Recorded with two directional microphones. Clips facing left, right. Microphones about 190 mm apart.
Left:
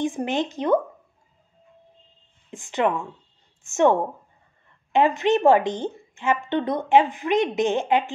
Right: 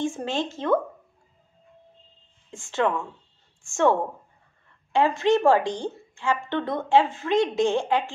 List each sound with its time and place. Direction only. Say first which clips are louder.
0.0 s a woman's voice: left 3 dB; 15° left (ahead or behind)
2.5 s a woman's voice: left 1 dB; 15° left (ahead or behind)